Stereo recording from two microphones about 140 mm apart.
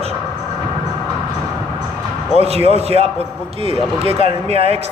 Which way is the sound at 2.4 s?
50° right (ahead or behind).